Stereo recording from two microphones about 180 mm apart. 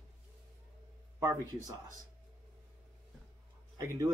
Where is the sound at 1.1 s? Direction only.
20° right (ahead or behind).